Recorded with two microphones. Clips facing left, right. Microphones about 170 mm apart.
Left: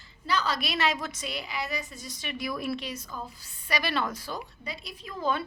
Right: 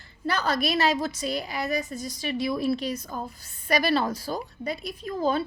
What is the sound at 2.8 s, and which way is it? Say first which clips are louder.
A woman's voice: right 6 dB; 40° right (ahead or behind).